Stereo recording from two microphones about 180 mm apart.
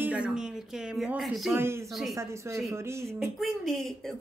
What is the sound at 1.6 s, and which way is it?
Speech, 15° right (ahead or behind).